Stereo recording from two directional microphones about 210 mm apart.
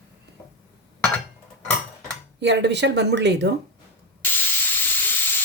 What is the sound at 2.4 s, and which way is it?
Speech, 55° right (ahead or behind).